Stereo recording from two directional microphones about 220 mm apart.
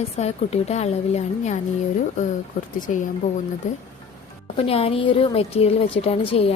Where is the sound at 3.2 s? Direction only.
35° left (ahead or behind).